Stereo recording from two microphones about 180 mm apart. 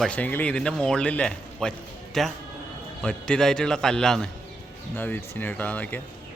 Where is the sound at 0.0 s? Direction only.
5° left (ahead or behind).